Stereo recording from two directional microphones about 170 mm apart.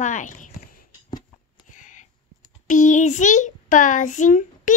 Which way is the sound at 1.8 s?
45° left (ahead or behind).